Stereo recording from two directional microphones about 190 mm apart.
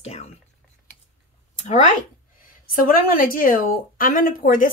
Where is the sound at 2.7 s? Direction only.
50° left (ahead or behind).